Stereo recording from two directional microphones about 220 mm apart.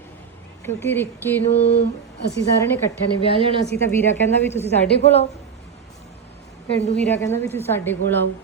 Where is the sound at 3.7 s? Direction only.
50° left (ahead or behind).